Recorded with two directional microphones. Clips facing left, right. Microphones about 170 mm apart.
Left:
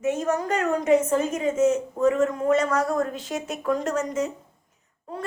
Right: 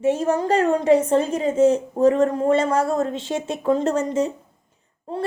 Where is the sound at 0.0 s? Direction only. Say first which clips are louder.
Right 4 dB; 30° right (ahead or behind).